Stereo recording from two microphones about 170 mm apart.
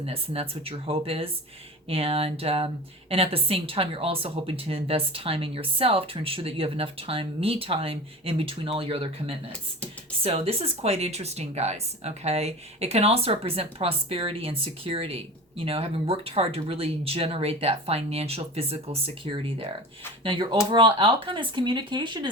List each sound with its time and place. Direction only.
0.0 s speech: 35° right (ahead or behind)